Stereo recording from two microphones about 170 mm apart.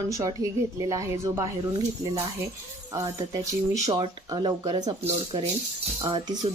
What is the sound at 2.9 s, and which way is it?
Speech, 20° right (ahead or behind).